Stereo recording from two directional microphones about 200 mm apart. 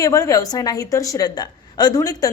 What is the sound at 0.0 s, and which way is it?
A man's voice, 15° left (ahead or behind).